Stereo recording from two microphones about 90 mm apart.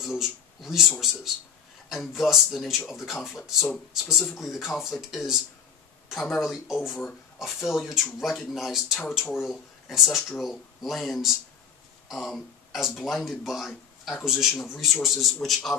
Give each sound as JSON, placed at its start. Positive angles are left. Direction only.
{"t": 0.0, "sound": "speech", "side_deg": -5}
{"t": 6.4, "sound": "speech", "side_deg": -5}